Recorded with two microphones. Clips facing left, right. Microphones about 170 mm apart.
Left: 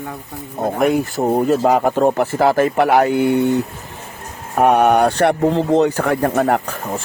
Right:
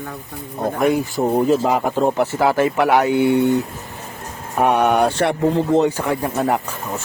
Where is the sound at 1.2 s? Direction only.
25° left (ahead or behind).